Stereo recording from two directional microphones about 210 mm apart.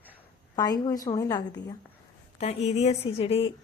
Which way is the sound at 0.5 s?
20° left (ahead or behind).